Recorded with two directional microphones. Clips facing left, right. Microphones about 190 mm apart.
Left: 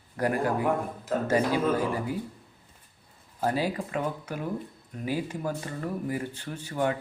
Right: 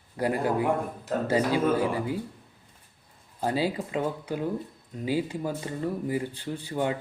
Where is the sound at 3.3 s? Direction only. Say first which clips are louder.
Right 1 dB; 15° right (ahead or behind).